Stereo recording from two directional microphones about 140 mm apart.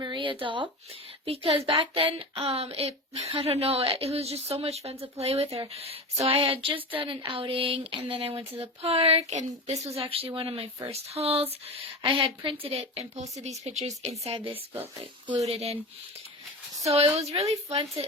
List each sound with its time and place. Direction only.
0.0 s speech: 35° right (ahead or behind); by 9.7 s 55° right (ahead or behind)
9.9 s speech: 45° right (ahead or behind)
16.9 s speech: 50° right (ahead or behind)